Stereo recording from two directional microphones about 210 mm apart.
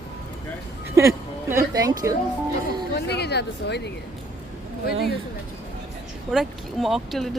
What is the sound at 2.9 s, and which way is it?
Speech, 50° left (ahead or behind).